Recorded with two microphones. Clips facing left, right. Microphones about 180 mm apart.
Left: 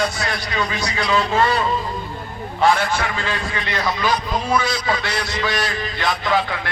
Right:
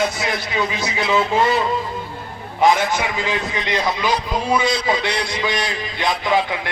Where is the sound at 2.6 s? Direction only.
15° right (ahead or behind).